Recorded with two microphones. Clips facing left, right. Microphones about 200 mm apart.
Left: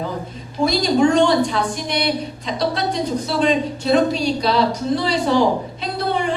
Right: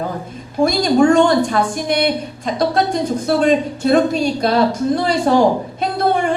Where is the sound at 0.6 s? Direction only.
50° right (ahead or behind).